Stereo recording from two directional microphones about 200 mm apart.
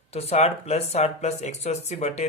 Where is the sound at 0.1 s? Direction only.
30° left (ahead or behind).